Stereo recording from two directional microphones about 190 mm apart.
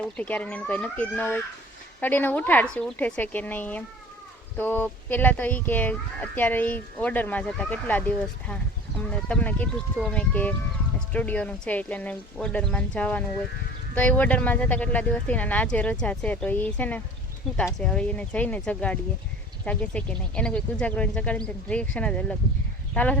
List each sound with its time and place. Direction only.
0.2 s speech: 10° left (ahead or behind)